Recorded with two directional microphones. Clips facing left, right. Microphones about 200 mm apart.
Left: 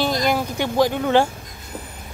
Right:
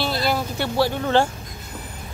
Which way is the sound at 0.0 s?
15° left (ahead or behind).